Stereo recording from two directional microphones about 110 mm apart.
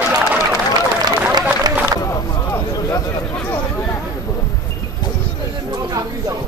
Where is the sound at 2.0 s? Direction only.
30° left (ahead or behind).